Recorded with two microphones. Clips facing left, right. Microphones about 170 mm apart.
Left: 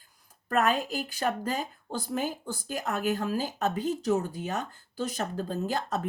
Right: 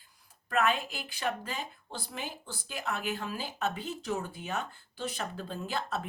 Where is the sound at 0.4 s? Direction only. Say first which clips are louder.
Left 3 dB; 40° left (ahead or behind).